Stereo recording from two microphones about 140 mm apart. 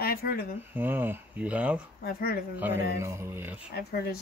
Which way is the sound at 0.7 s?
15° right (ahead or behind).